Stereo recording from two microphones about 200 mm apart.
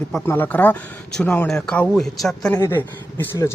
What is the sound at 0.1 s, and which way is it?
Speech, 10° left (ahead or behind).